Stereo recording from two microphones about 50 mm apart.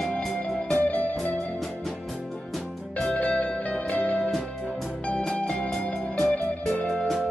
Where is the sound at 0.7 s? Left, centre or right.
Left.